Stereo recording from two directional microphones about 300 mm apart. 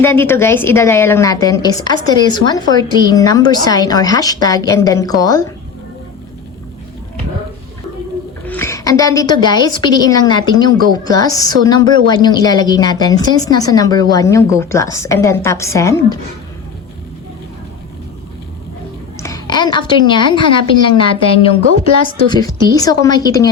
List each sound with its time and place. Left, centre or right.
0.0 s a woman's voice: centre
8.4 s a woman's voice: centre
19.2 s a woman's voice: centre